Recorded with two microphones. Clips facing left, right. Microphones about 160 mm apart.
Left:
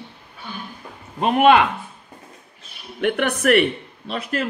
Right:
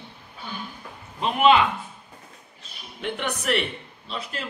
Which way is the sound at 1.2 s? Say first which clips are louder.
Left 4 dB; 55° left (ahead or behind).